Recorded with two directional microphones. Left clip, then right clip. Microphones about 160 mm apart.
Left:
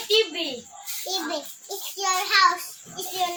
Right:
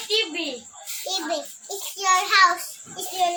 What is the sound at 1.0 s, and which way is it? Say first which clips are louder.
A child's voice: right 2 dB; 20° right (ahead or behind).